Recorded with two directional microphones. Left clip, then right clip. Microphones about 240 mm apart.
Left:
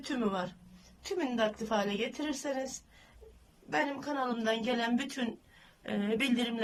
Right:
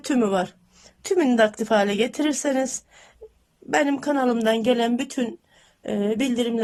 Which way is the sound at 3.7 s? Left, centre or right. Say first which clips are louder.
Right 11 dB; right.